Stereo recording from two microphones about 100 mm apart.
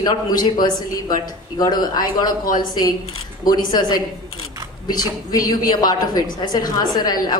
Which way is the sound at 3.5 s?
45° left (ahead or behind).